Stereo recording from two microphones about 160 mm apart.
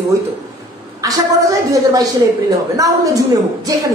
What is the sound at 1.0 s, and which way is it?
A woman's voice, 20° right (ahead or behind).